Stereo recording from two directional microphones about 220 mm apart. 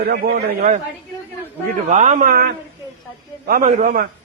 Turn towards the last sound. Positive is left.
turn(degrees=-35)  # may be behind; listen again after turning